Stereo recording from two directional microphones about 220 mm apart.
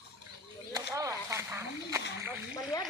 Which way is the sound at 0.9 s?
15° right (ahead or behind).